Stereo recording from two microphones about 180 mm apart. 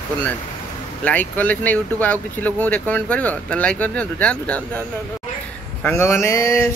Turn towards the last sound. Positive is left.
turn(degrees=15)  # may be behind; listen again after turning